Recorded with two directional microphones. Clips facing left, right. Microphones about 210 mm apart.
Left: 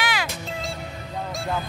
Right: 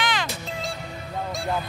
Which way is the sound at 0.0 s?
10° left (ahead or behind).